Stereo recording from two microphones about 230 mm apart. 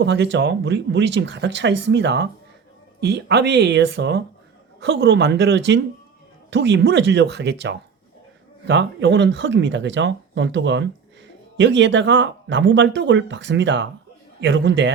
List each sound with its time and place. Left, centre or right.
0.0 s speech: right